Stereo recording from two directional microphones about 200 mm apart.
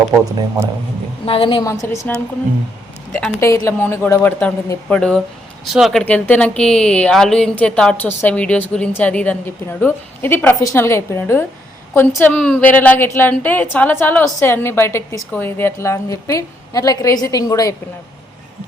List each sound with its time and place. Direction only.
1.2 s a woman's voice: 25° left (ahead or behind)